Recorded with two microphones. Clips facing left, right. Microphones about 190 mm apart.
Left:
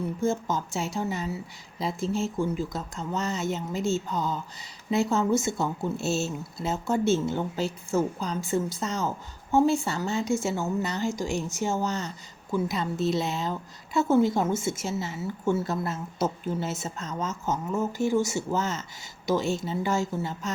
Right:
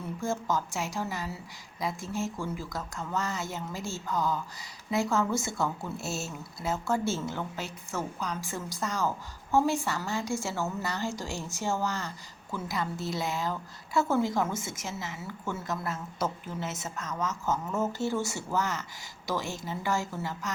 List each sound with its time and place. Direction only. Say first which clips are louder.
0.2 s speech: left 2 dB; 20° left (ahead or behind)